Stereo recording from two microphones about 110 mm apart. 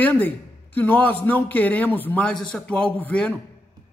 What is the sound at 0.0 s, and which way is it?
A man's voice, 15° left (ahead or behind).